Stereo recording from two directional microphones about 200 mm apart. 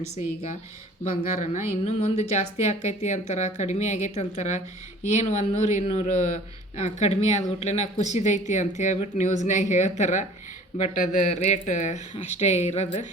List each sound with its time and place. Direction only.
0.0 s a woman's voice: 35° left (ahead or behind)